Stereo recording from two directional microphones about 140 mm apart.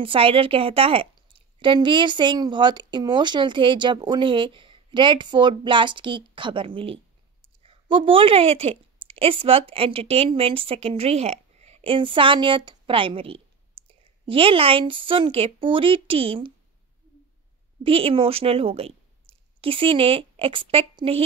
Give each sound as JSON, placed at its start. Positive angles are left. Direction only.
{"t": 0.0, "sound": "a woman's voice", "side_deg": -40}
{"t": 17.8, "sound": "a woman's voice", "side_deg": -40}